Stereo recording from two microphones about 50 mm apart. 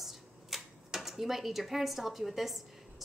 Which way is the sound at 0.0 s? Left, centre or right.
Centre.